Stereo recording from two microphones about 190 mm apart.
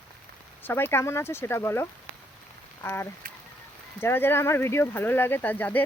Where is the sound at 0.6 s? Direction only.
10° left (ahead or behind).